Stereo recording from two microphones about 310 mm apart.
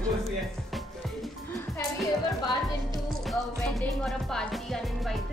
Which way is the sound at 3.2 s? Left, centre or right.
Centre.